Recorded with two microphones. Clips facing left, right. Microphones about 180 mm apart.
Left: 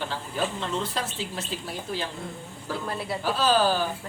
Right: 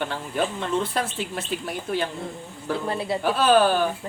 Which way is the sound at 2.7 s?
60° right (ahead or behind).